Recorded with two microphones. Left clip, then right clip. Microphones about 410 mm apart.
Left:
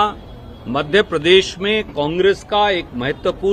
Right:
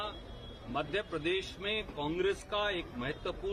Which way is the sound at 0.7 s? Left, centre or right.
Left.